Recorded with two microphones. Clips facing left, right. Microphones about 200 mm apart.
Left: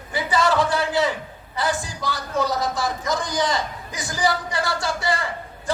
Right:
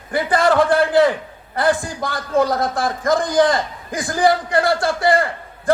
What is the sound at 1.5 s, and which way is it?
A man's voice, 55° right (ahead or behind).